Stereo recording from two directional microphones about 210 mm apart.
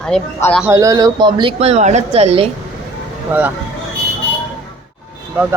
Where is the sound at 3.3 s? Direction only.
10° right (ahead or behind).